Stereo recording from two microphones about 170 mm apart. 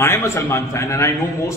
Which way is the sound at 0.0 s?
15° left (ahead or behind).